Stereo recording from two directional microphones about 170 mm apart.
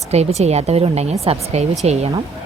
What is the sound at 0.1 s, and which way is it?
A woman's voice, 40° right (ahead or behind).